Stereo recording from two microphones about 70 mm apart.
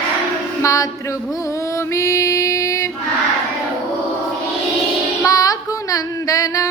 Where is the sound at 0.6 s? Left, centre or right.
Left.